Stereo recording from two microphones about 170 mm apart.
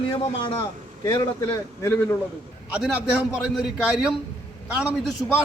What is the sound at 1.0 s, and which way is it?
Speech, 20° left (ahead or behind).